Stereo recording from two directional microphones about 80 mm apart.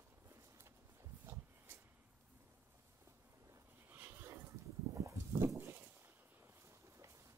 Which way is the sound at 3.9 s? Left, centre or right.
Right.